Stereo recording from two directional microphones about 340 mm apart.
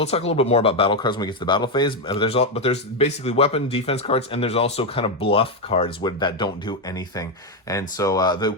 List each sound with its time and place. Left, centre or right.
0.0 s speech: centre